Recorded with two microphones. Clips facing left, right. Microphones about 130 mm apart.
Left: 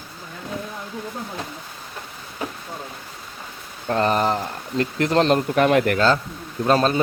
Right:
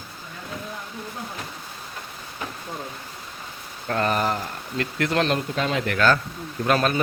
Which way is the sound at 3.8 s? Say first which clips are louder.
Left 3 dB; 30° left (ahead or behind).